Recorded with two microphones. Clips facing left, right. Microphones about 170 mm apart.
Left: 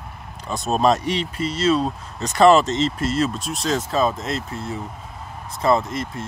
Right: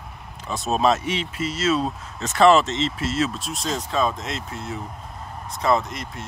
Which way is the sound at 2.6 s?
40° left (ahead or behind).